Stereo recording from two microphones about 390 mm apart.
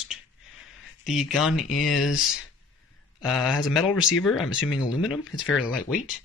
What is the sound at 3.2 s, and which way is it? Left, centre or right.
Speech, centre.